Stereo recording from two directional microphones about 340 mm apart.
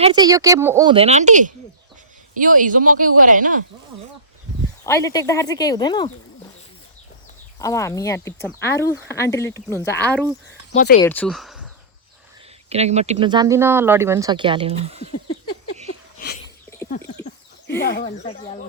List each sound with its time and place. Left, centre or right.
0.0 s speech: centre
4.9 s speech: centre
7.6 s speech: centre
12.6 s speech: centre
17.2 s speech: left